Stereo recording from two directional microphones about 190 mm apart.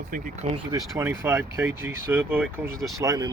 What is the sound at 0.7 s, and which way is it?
Speech, 15° right (ahead or behind).